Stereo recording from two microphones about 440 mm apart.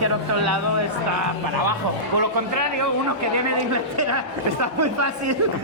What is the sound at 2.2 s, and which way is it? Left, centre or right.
A man's voice, right.